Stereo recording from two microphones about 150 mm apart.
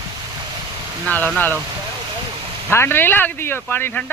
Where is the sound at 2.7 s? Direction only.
15° left (ahead or behind).